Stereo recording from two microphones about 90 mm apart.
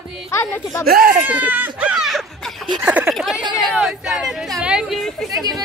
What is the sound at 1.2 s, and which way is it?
Speech, 20° right (ahead or behind).